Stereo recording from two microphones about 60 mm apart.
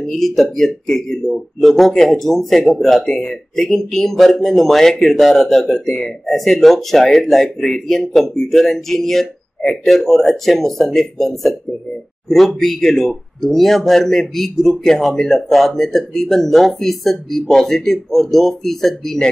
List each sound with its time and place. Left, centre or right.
0.0 s speech: centre